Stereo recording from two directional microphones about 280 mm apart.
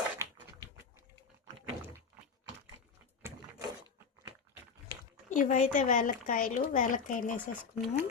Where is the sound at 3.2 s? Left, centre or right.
Centre.